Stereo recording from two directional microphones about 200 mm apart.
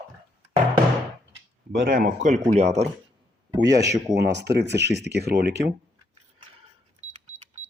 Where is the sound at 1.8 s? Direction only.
45° right (ahead or behind).